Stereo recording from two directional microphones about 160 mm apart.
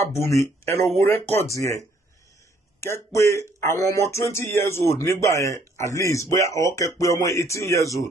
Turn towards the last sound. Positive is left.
turn(degrees=20)  # may be behind; listen again after turning